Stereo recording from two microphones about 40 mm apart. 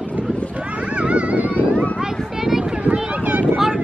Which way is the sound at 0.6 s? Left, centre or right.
Right.